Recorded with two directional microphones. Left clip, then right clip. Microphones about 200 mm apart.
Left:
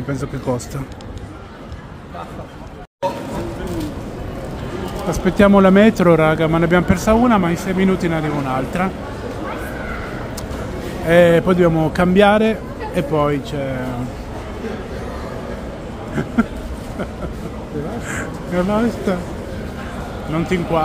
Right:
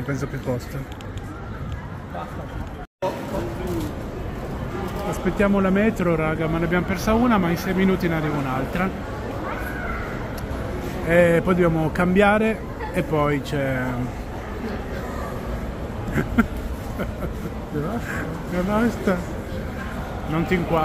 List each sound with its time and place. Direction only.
0.5 s a man's voice: 20° left (ahead or behind)
5.2 s speech: 35° left (ahead or behind)
7.2 s a man's voice: 10° left (ahead or behind)
11.1 s a man's voice: 15° left (ahead or behind)
13.5 s speech: centre (ahead or behind)
18.7 s a man's voice: 5° left (ahead or behind)
20.3 s speech: 5° left (ahead or behind)